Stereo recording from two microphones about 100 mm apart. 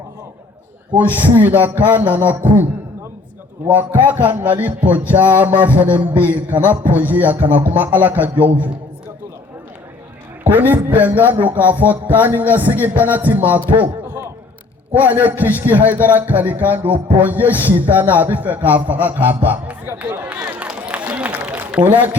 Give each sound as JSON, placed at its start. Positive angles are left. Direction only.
{"t": 0.9, "sound": "music", "side_deg": -15}
{"t": 3.7, "sound": "music", "side_deg": -15}
{"t": 10.4, "sound": "music", "side_deg": -20}
{"t": 14.9, "sound": "a man's voice", "side_deg": -15}